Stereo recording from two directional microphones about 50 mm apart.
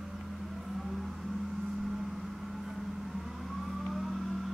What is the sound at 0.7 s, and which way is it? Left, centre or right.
Vehicle, centre.